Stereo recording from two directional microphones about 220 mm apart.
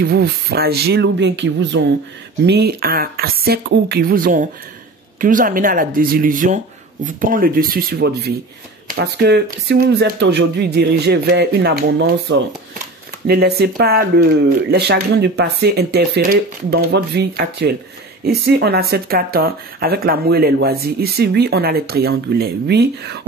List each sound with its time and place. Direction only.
0.0 s speech: 45° right (ahead or behind)